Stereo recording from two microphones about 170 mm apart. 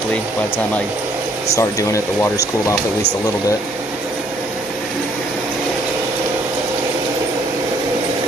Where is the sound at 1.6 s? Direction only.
20° left (ahead or behind).